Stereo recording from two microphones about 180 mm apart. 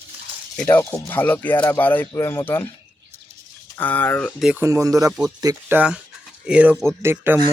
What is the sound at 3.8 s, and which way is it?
Speech, 10° left (ahead or behind).